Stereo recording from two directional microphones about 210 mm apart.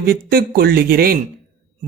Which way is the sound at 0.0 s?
45° right (ahead or behind).